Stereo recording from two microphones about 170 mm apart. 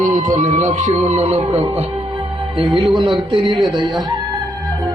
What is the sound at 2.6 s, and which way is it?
Speech, 30° right (ahead or behind).